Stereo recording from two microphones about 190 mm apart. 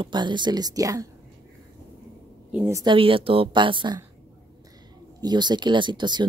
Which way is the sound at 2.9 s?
30° right (ahead or behind).